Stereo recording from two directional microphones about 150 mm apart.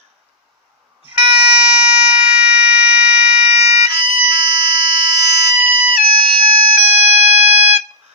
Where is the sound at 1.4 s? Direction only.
10° right (ahead or behind).